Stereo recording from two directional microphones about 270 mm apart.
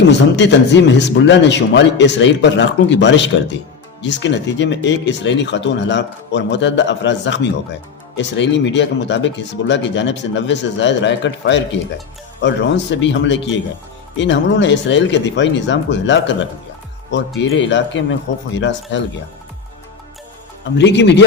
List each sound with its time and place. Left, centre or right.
0.1 s speech: left
20.7 s speech: left